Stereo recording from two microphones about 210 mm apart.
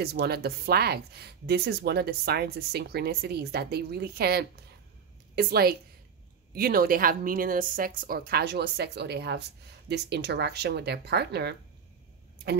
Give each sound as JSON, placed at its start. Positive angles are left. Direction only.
{"t": 0.0, "sound": "a woman's voice", "side_deg": -50}